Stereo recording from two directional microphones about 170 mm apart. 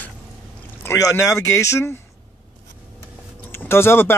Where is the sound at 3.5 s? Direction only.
15° left (ahead or behind).